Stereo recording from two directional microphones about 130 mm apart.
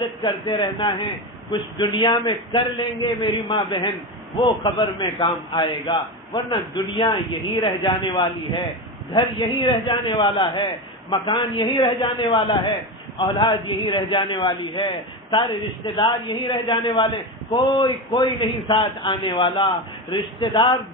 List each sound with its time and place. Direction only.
0.0 s a man's voice: 40° left (ahead or behind)